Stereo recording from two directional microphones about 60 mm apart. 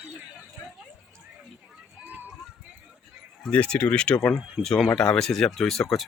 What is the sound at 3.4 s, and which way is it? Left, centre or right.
Speech, centre.